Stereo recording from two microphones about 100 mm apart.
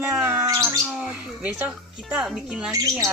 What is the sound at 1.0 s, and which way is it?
Speech, 10° right (ahead or behind).